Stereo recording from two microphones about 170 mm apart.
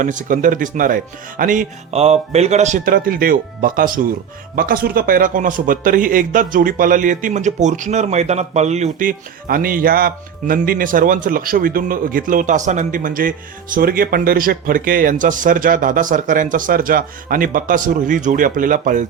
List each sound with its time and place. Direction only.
0.0 s a man's voice: 50° right (ahead or behind)